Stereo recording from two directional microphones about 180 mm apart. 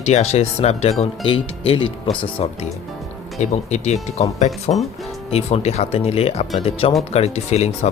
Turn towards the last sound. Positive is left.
turn(degrees=35)  # may be behind; listen again after turning